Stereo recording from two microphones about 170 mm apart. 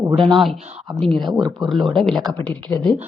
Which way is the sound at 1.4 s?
25° right (ahead or behind).